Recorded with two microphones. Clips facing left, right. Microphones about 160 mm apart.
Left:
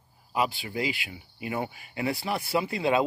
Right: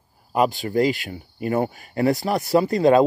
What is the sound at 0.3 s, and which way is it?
Speech, 45° right (ahead or behind).